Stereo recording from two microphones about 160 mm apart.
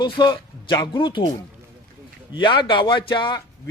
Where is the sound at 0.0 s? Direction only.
25° left (ahead or behind).